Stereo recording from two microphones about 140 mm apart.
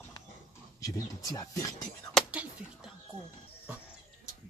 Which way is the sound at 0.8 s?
25° left (ahead or behind).